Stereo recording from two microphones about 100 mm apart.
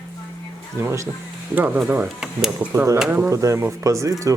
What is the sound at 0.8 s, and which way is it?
Speech, 30° right (ahead or behind).